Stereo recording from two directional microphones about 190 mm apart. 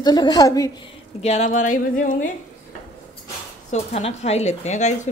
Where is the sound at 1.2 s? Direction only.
40° left (ahead or behind).